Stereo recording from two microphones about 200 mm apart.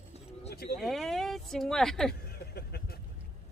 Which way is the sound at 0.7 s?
Centre (ahead or behind).